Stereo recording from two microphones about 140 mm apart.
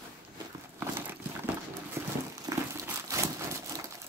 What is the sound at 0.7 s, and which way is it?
Horse, 15° right (ahead or behind).